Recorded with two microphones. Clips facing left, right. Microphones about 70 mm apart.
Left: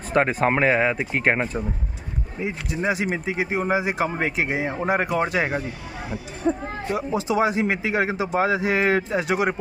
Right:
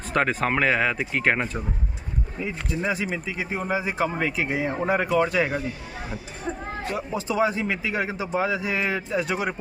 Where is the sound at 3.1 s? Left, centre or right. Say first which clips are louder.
Left 4 dB; left; by 4.0 s centre.